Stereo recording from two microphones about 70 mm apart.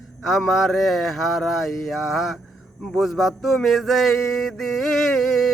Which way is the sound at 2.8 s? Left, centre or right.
Centre.